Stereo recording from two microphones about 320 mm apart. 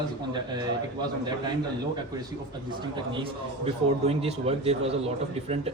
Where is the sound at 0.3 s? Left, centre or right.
Centre.